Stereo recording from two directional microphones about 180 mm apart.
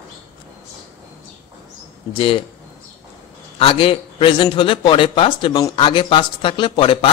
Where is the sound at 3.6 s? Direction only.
30° left (ahead or behind).